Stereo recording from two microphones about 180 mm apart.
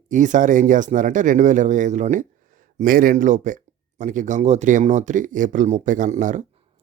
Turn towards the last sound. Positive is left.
turn(degrees=-45)  # may be behind; listen again after turning